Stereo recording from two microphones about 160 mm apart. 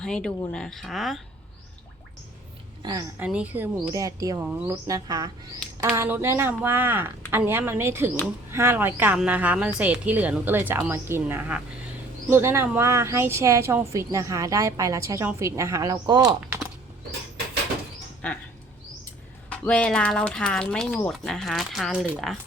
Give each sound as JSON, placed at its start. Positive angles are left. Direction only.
{"t": 0.0, "sound": "speech", "side_deg": 5}
{"t": 2.8, "sound": "speech", "side_deg": -25}
{"t": 3.2, "sound": "a woman's voice", "side_deg": -10}
{"t": 3.9, "sound": "a woman's voice", "side_deg": -20}
{"t": 18.2, "sound": "a sound", "side_deg": 10}
{"t": 19.5, "sound": "speech", "side_deg": 10}